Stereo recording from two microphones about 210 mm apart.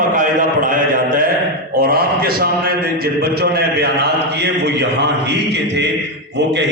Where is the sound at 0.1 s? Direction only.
40° right (ahead or behind).